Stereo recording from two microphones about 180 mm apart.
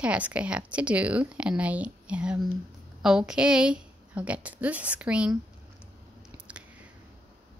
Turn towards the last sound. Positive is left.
turn(degrees=-5)  # may be behind; listen again after turning